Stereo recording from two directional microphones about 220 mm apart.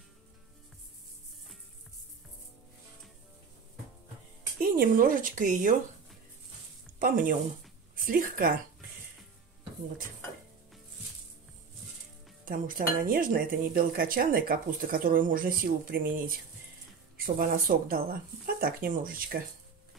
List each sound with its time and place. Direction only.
4.6 s speech: 40° right (ahead or behind)
7.0 s speech: 40° right (ahead or behind)
12.4 s speech: 40° right (ahead or behind)